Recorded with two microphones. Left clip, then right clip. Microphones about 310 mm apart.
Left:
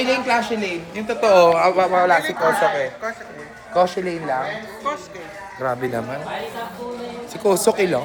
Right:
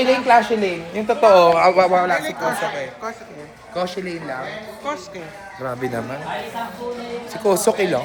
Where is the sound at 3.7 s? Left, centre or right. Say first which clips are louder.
Left 6 dB; centre.